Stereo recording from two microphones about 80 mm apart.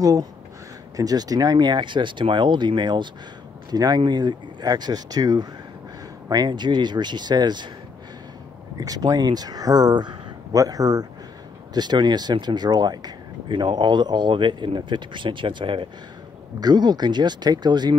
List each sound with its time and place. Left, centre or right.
0.0 s speech: right
3.7 s speech: right
8.7 s speech: right
10.5 s speech: right
11.7 s speech: right
16.5 s speech: right